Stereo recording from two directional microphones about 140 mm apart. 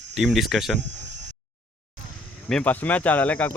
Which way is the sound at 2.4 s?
10° left (ahead or behind).